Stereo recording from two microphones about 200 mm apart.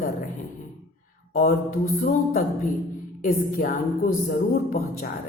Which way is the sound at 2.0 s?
45° left (ahead or behind).